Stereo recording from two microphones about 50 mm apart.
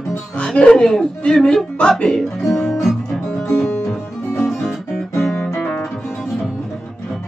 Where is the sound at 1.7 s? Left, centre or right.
Centre.